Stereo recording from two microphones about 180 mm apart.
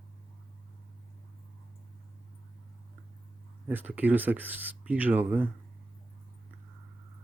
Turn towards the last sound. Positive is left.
turn(degrees=-10)  # may be behind; listen again after turning